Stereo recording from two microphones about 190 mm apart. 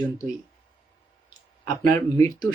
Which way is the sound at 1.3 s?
20° left (ahead or behind).